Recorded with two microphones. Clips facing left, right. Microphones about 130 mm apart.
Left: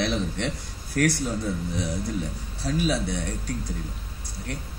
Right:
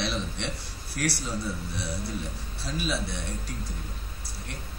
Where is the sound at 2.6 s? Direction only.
40° left (ahead or behind).